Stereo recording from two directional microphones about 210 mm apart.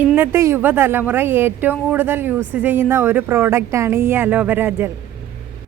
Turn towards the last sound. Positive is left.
turn(degrees=-10)  # may be behind; listen again after turning